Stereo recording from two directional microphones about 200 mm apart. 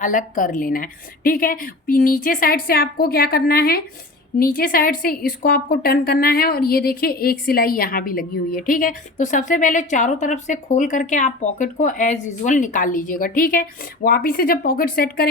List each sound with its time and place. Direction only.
0.0 s a woman's voice: 40° left (ahead or behind)